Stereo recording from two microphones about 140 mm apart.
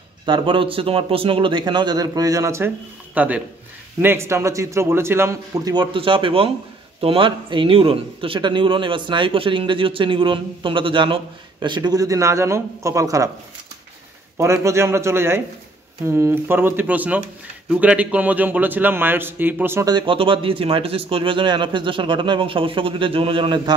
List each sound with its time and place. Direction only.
0.2 s a man's voice: 35° right (ahead or behind)
14.4 s a man's voice: 20° right (ahead or behind)
19.9 s a man's voice: 35° right (ahead or behind)